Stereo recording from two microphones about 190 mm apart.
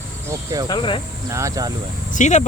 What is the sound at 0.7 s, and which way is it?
Speech, 25° left (ahead or behind).